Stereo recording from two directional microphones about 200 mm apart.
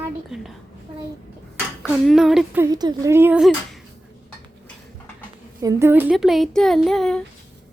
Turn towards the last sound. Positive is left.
turn(degrees=0)  # may be behind; listen again after turning